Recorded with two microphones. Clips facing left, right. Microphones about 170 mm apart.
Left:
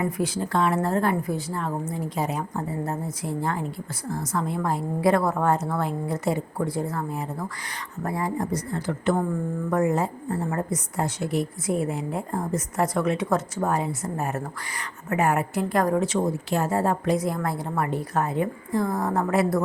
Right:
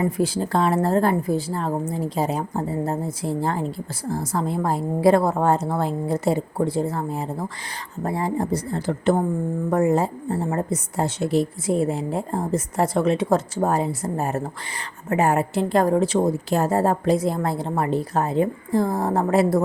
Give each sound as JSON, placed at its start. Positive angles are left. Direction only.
{"t": 0.0, "sound": "a woman's voice", "side_deg": -30}